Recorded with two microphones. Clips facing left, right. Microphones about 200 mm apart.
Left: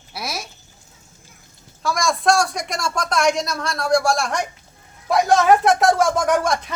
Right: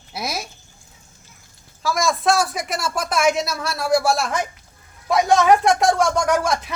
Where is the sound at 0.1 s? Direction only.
20° right (ahead or behind).